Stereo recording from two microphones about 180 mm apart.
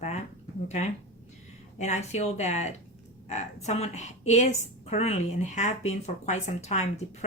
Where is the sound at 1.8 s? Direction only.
40° left (ahead or behind).